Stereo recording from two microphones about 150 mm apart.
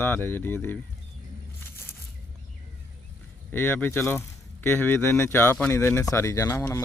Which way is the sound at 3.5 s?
15° left (ahead or behind).